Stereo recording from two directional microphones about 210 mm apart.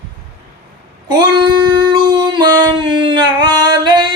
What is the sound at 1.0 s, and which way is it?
Female singing, 20° right (ahead or behind).